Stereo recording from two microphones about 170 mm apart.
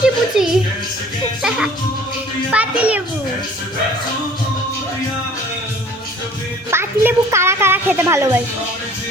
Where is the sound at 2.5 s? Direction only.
10° right (ahead or behind).